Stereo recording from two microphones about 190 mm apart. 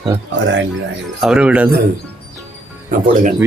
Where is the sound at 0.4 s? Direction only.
70° right (ahead or behind).